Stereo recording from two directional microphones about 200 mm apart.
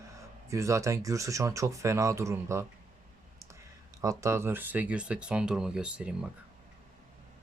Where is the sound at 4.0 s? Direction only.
15° right (ahead or behind).